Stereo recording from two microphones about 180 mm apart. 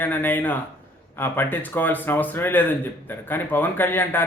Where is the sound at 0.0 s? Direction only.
10° left (ahead or behind).